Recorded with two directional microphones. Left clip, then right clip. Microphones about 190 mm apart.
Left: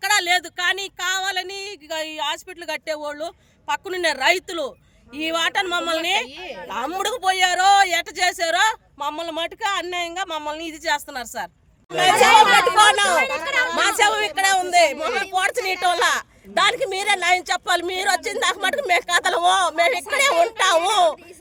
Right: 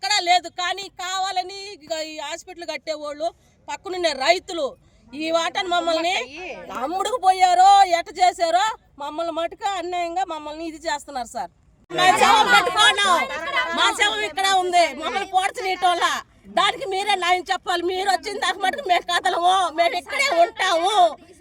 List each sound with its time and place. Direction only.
0.0 s a woman's voice: 15° left (ahead or behind)
6.3 s a woman's voice: 20° right (ahead or behind)
6.6 s a woman's voice: 10° left (ahead or behind)